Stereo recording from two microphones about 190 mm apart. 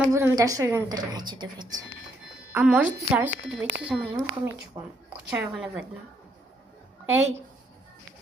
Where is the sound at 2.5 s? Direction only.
5° right (ahead or behind).